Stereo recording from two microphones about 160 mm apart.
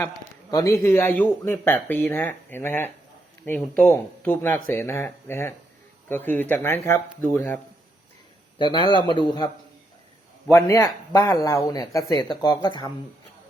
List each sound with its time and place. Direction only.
0.5 s speech: 20° left (ahead or behind)
8.5 s speech: 30° left (ahead or behind)
10.5 s speech: 20° left (ahead or behind)